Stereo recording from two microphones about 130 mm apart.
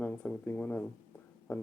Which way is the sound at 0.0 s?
15° left (ahead or behind).